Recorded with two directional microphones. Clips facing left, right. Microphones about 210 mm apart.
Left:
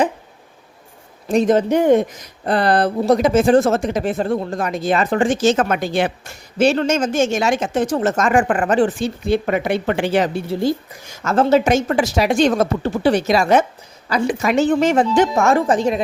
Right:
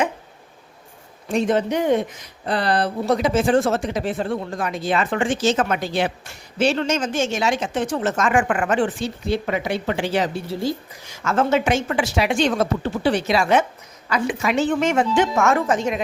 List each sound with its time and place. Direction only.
1.3 s speech: 40° left (ahead or behind)
9.2 s speech: 55° left (ahead or behind)
11.2 s speech: 35° left (ahead or behind)